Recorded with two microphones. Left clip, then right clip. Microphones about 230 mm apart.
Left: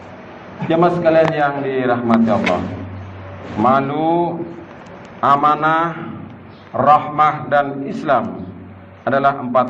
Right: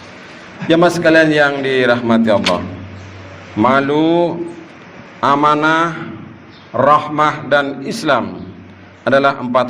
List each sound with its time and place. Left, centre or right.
0.7 s a man's voice: right
3.6 s a man's voice: right